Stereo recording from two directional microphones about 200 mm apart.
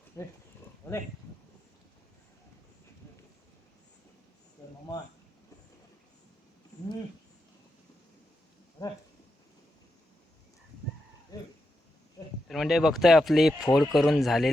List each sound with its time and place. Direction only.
0.1 s speech: 15° left (ahead or behind)
8.8 s speech: 15° left (ahead or behind)
11.3 s a sound: 20° left (ahead or behind)
12.5 s speech: centre (ahead or behind)